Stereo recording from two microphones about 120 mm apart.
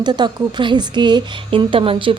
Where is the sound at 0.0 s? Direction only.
40° right (ahead or behind).